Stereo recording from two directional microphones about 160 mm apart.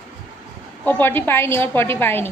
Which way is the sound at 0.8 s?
15° left (ahead or behind).